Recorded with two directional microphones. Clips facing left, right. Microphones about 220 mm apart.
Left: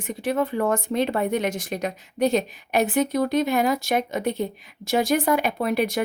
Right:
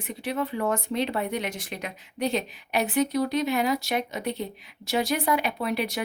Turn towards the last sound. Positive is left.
turn(degrees=50)  # may be behind; listen again after turning